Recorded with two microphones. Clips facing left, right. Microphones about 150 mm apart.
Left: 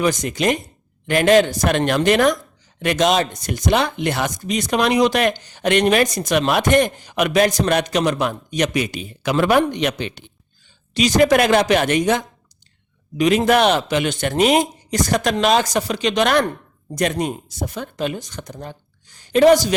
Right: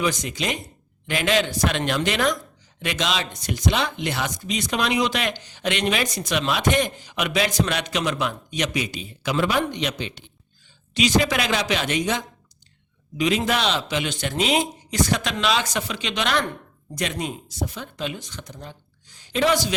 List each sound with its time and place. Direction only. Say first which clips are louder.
0.0 s speech: left 6 dB; 50° left (ahead or behind)
10.9 s speech: left 6 dB; 45° left (ahead or behind)